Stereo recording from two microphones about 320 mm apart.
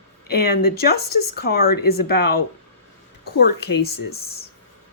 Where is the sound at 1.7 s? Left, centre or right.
Left.